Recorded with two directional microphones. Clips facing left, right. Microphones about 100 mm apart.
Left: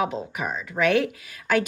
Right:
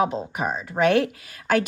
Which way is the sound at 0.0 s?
30° right (ahead or behind).